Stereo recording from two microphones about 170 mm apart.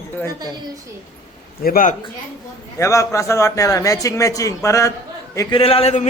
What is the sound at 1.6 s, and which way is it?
Speech, 55° left (ahead or behind).